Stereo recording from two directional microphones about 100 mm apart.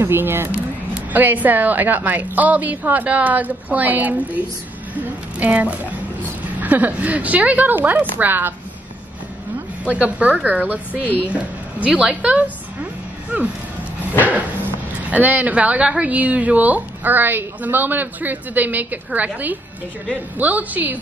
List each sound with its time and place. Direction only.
0.0 s a woman's voice: 20° right (ahead or behind)
4.9 s music: 15° right (ahead or behind)
6.6 s a woman's voice: 15° right (ahead or behind)
9.8 s a woman's voice: 15° right (ahead or behind)
15.0 s a woman's voice: 15° right (ahead or behind)